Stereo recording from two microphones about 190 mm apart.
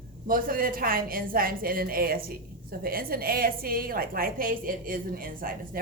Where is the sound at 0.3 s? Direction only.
50° right (ahead or behind).